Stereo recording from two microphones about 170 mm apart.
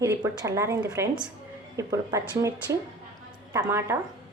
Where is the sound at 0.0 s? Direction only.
15° right (ahead or behind).